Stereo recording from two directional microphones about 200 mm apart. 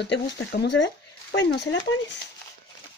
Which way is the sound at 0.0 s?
60° left (ahead or behind).